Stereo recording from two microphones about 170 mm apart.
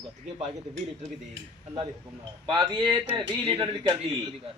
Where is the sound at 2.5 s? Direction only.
25° right (ahead or behind).